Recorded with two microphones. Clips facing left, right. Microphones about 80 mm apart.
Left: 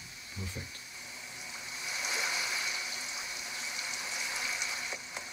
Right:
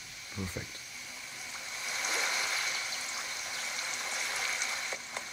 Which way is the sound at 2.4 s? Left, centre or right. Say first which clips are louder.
Right 1 dB; right.